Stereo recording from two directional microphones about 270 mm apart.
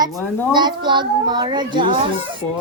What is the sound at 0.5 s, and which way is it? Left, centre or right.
A child's voice, centre.